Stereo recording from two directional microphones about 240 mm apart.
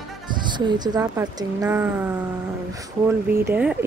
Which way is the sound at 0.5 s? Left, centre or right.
Centre.